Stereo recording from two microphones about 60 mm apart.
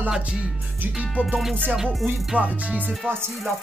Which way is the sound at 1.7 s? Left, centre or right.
Centre.